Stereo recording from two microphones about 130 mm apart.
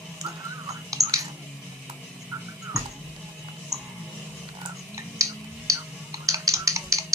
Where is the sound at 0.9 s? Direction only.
25° right (ahead or behind).